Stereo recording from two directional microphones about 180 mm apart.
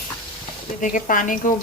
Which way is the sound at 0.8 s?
45° left (ahead or behind).